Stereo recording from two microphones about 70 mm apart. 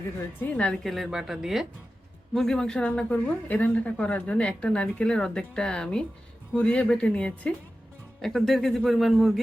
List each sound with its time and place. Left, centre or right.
0.5 s a woman's voice: centre
0.8 s speech: centre
1.1 s speech: centre
2.3 s a woman's voice: centre
8.2 s speech: centre